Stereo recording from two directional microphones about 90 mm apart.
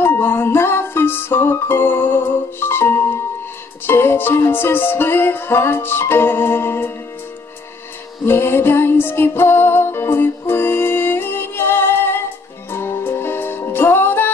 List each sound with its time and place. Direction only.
0.0 s music: 25° left (ahead or behind)
8.3 s music: 25° left (ahead or behind)